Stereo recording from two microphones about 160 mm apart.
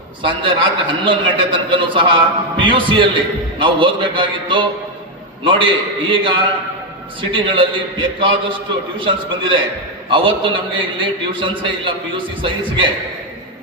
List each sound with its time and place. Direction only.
0.2 s a man's voice: 30° right (ahead or behind)